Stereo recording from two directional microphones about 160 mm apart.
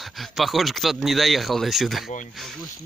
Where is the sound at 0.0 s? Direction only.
Centre (ahead or behind).